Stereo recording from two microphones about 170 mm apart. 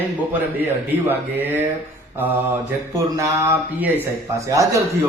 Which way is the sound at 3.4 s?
10° right (ahead or behind).